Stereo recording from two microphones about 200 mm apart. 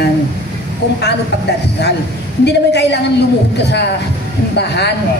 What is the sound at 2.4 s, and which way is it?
Speech, 55° left (ahead or behind).